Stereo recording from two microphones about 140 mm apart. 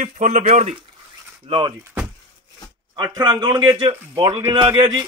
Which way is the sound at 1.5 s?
35° right (ahead or behind).